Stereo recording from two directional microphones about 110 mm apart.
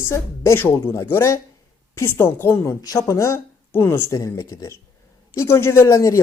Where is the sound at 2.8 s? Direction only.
35° left (ahead or behind).